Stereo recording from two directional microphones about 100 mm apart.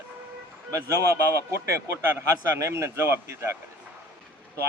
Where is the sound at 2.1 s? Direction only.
25° right (ahead or behind).